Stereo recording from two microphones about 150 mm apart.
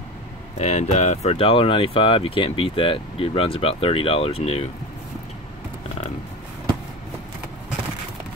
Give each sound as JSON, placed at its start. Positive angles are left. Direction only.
{"t": 0.6, "sound": "speech", "side_deg": 50}